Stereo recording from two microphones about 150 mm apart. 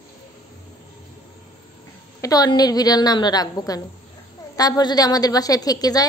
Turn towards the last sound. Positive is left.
turn(degrees=25)  # may be behind; listen again after turning